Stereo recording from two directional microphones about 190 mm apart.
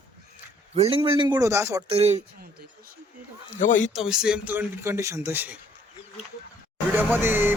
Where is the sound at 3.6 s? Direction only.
40° left (ahead or behind).